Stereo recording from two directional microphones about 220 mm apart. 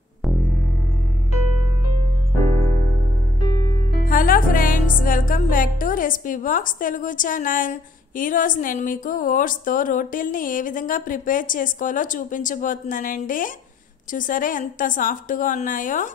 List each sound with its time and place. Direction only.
4.0 s music: 40° left (ahead or behind)